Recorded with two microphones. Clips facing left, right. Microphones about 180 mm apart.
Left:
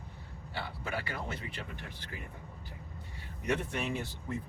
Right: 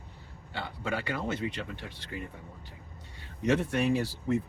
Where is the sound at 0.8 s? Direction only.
75° right (ahead or behind).